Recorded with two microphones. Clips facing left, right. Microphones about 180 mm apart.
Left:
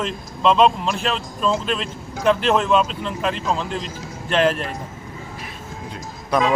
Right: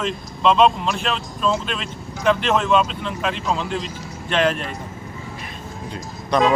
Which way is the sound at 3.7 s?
45° left (ahead or behind).